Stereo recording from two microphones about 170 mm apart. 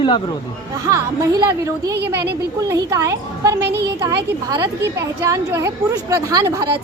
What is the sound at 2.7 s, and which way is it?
A woman's voice, 20° right (ahead or behind).